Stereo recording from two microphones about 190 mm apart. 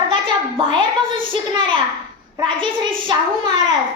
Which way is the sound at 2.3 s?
25° right (ahead or behind).